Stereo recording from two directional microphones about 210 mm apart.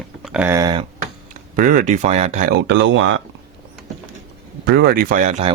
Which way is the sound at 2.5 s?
60° right (ahead or behind).